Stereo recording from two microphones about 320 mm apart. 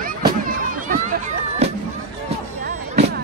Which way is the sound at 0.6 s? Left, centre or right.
Right.